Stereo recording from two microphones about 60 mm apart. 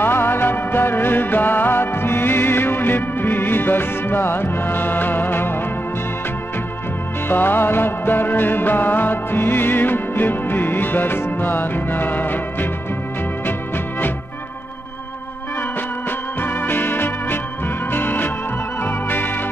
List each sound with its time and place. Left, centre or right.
0.0 s music: left
7.2 s music: left
16.3 s music: left
18.8 s organ: left